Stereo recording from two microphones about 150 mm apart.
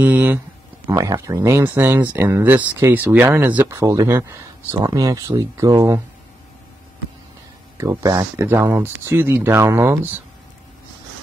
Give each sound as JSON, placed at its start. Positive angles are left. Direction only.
{"t": 0.0, "sound": "speech", "side_deg": -10}
{"t": 0.8, "sound": "speech", "side_deg": -20}
{"t": 7.7, "sound": "speech", "side_deg": -20}